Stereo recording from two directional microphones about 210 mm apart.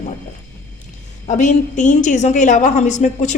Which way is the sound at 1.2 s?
35° left (ahead or behind).